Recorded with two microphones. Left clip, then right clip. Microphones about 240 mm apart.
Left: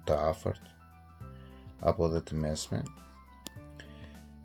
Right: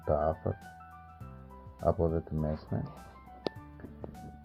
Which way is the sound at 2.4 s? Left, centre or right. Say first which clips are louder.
Left 1 dB; left.